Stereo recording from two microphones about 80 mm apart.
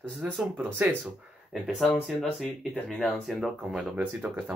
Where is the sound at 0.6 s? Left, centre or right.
Right.